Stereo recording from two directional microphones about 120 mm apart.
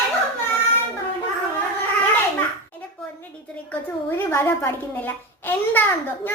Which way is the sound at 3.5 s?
15° left (ahead or behind).